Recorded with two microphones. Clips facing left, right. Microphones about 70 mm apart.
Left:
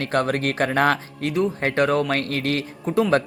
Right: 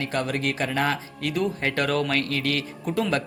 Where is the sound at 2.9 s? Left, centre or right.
Left.